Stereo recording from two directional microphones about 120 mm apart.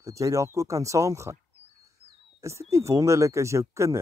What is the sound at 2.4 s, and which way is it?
Speech, 25° right (ahead or behind).